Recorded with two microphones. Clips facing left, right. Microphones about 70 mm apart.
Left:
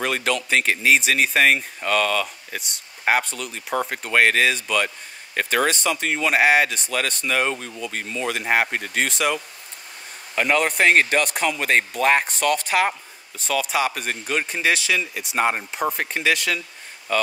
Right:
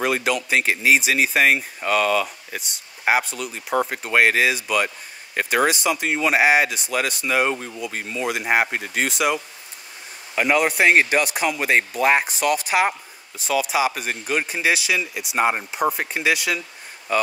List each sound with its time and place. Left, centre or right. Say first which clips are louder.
0.0 s speech: right 2 dB; centre